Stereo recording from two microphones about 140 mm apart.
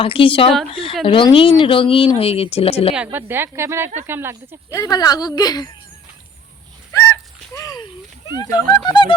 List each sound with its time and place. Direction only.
0.0 s speech: 40° left (ahead or behind)
2.9 s a woman's voice: 10° right (ahead or behind)
4.7 s a woman's voice: 25° left (ahead or behind)
7.5 s a sound: 25° left (ahead or behind)
8.3 s speech: 30° left (ahead or behind)